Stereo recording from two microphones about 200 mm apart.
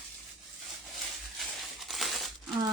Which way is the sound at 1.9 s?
Centre (ahead or behind).